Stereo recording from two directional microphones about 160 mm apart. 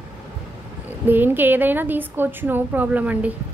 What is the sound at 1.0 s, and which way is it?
A woman's voice, 10° right (ahead or behind).